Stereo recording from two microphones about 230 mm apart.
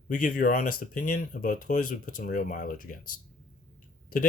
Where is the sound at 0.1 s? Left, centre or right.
Left.